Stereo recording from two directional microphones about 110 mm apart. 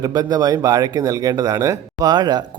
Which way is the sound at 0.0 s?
35° right (ahead or behind).